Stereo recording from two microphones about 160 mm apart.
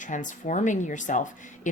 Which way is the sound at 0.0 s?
50° left (ahead or behind).